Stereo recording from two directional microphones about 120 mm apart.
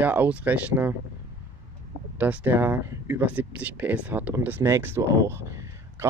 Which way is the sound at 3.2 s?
10° right (ahead or behind).